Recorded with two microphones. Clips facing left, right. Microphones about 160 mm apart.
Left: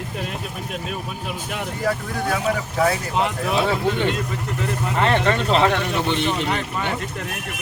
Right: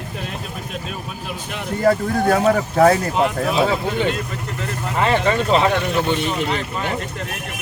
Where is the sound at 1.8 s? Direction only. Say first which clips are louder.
Right 8 dB; 45° right (ahead or behind).